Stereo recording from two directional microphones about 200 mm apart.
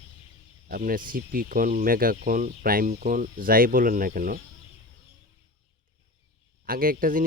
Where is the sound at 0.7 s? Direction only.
45° right (ahead or behind).